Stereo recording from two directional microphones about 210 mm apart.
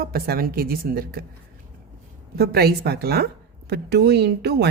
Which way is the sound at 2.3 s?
50° right (ahead or behind).